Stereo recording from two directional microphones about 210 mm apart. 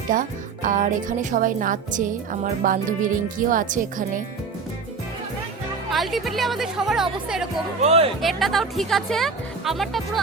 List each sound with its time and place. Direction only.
0.1 s speech: 40° right (ahead or behind)
5.9 s speech: centre (ahead or behind)
7.8 s speech: 30° right (ahead or behind)
8.2 s speech: centre (ahead or behind)